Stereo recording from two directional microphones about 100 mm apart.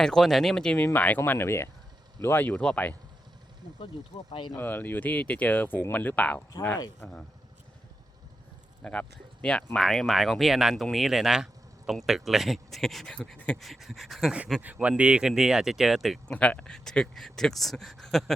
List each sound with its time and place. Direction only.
0.0 s speech: 5° left (ahead or behind)
4.3 s speech: 55° left (ahead or behind)
4.5 s speech: 20° left (ahead or behind)
8.8 s speech: 10° left (ahead or behind)
13.6 s speech: centre (ahead or behind)
16.3 s speech: 10° left (ahead or behind)